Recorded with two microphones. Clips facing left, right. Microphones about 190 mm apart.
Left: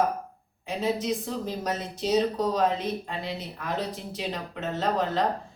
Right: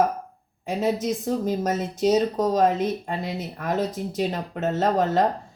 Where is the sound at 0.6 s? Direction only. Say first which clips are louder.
Right 4 dB; 45° right (ahead or behind).